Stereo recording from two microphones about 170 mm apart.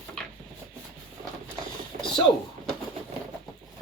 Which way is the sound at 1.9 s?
45° right (ahead or behind).